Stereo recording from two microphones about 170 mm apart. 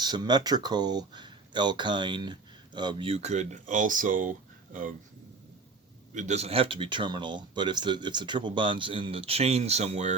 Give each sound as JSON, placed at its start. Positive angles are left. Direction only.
{"t": 0.0, "sound": "speech", "side_deg": -25}
{"t": 6.1, "sound": "speech", "side_deg": -45}